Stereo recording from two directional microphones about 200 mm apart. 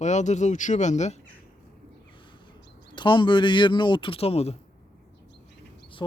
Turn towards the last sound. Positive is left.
turn(degrees=20)  # may be behind; listen again after turning